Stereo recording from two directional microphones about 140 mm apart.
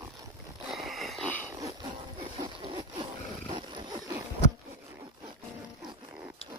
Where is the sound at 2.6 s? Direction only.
35° right (ahead or behind).